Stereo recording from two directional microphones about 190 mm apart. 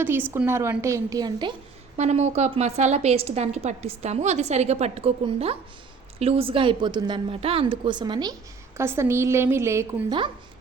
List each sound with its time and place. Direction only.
0.0 s a woman's voice: 10° right (ahead or behind)
2.0 s a woman's voice: 35° right (ahead or behind); by 10.2 s 15° right (ahead or behind)